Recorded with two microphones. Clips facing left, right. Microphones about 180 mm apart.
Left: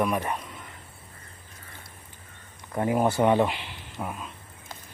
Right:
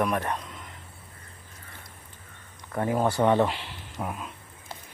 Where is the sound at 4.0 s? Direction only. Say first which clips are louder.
Right 1 dB; centre (ahead or behind).